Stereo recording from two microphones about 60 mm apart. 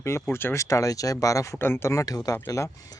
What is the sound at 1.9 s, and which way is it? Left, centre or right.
Speech, left.